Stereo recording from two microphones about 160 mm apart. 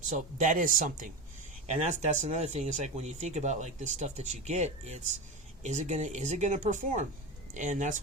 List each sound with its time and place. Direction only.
0.1 s speech: 55° right (ahead or behind)